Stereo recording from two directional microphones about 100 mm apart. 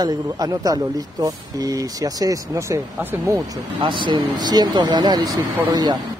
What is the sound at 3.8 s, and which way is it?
Speech, 55° right (ahead or behind).